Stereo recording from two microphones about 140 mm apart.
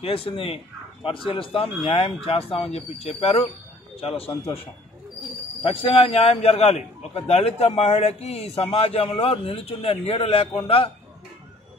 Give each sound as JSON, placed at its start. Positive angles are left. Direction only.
{"t": 0.0, "sound": "a man's voice", "side_deg": 40}